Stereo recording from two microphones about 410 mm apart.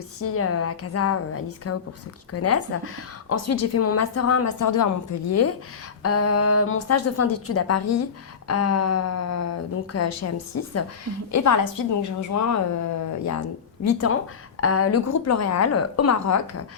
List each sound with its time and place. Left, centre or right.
0.2 s a woman's voice: left
13.8 s a woman's voice: left